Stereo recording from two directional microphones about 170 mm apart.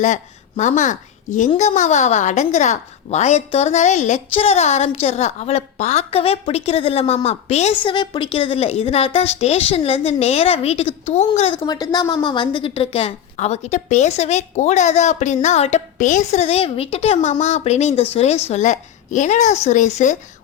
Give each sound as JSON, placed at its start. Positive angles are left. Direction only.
{"t": 0.0, "sound": "a woman's voice", "side_deg": 45}
{"t": 7.9, "sound": "a woman's voice", "side_deg": 30}
{"t": 11.6, "sound": "a woman's voice", "side_deg": 25}